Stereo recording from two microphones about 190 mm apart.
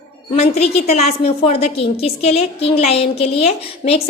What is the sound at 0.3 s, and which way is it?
A woman's voice, 35° left (ahead or behind).